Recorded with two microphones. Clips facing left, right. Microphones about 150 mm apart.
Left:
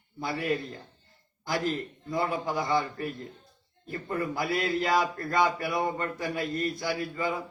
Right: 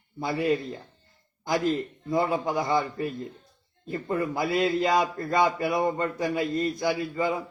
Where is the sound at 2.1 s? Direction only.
25° right (ahead or behind).